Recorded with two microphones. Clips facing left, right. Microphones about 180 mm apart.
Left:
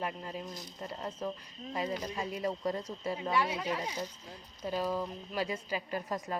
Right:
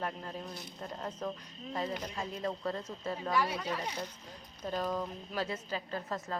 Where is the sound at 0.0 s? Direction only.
5° left (ahead or behind).